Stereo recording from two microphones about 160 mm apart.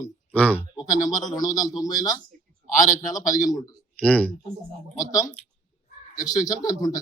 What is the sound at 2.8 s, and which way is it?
Speech, 55° left (ahead or behind).